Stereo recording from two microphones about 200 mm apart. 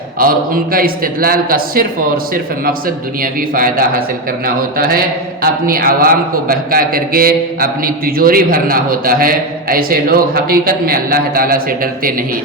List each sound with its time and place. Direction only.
0.2 s a man's voice: 45° right (ahead or behind)